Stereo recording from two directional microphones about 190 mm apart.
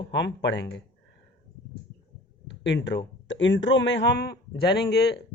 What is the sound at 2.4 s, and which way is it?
Speech, 70° left (ahead or behind).